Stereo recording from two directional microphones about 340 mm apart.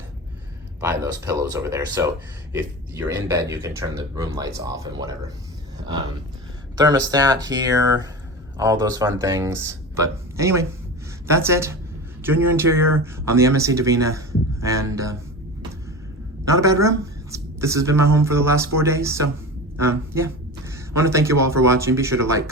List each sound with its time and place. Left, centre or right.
0.8 s speech: centre
6.7 s speech: centre
16.6 s speech: centre